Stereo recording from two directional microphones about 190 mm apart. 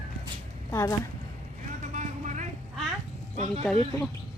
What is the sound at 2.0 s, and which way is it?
Vehicle, 40° right (ahead or behind).